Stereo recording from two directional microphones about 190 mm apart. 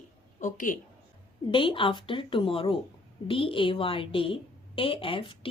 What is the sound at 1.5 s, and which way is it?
A woman's voice, 25° left (ahead or behind).